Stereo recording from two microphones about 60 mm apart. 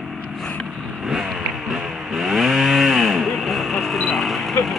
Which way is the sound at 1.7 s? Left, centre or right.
Centre.